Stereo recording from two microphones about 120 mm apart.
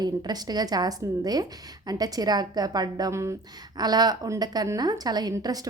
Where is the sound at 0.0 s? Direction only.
35° right (ahead or behind).